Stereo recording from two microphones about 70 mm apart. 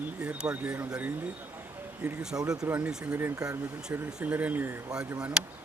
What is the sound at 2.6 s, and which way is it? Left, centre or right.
Speech, right.